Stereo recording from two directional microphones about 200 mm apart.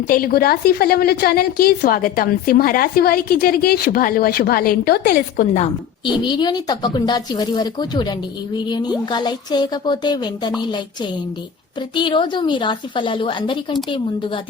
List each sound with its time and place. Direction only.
0.1 s a woman's voice: 45° left (ahead or behind)
6.2 s speech: 20° left (ahead or behind)
11.9 s speech: 25° left (ahead or behind)